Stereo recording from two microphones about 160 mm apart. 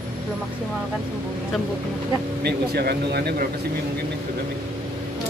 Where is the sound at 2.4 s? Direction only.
80° right.